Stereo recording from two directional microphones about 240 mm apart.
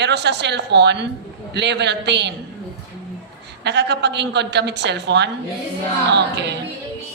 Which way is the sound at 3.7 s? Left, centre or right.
Right.